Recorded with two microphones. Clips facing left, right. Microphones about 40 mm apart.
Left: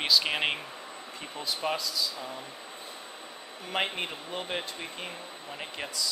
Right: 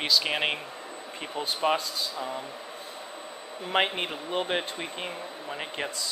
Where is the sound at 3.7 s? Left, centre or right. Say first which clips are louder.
Right 5 dB; right.